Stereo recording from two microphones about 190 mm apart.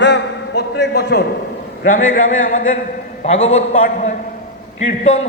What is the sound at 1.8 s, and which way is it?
A man's voice, 45° left (ahead or behind).